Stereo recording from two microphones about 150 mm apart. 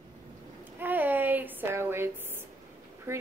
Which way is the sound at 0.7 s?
10° right (ahead or behind).